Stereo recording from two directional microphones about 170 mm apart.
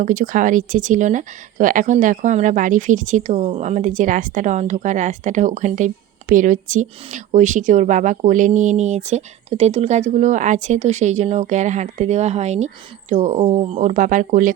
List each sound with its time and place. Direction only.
0.0 s speech: 50° right (ahead or behind)